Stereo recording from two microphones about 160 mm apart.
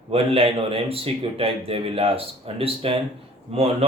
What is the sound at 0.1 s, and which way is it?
Speech, 35° right (ahead or behind).